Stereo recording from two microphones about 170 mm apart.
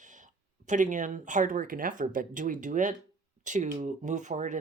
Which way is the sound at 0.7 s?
50° right (ahead or behind).